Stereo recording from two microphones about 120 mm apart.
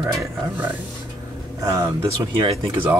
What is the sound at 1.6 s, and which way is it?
Speech, 30° right (ahead or behind).